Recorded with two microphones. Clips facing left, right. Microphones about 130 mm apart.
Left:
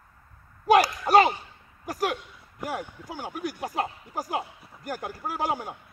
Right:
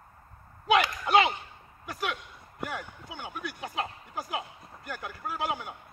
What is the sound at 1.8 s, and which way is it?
Speech, 40° left (ahead or behind).